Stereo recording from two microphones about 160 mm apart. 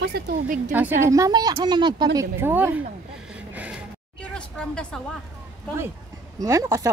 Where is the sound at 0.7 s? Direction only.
10° right (ahead or behind); by 2.0 s 25° right (ahead or behind).